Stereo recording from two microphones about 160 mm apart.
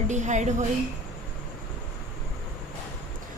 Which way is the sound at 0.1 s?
50° right (ahead or behind).